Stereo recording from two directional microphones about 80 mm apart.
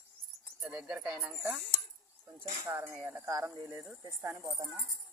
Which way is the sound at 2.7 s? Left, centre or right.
Right.